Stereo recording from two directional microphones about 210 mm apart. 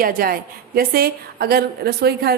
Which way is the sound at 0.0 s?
45° right (ahead or behind).